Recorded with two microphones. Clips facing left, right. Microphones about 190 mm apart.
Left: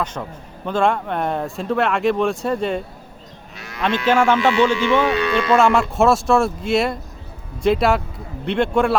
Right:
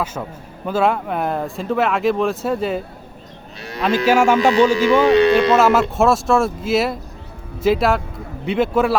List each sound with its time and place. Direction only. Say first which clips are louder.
0.0 s speech: right 1 dB; 5° right (ahead or behind)
4.0 s speech: right 1 dB; 10° right (ahead or behind)
4.4 s speech: right 3 dB; 40° right (ahead or behind)
5.5 s speech: right 1 dB; 5° right (ahead or behind)